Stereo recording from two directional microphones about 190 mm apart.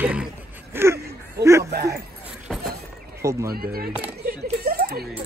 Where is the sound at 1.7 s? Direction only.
55° right (ahead or behind).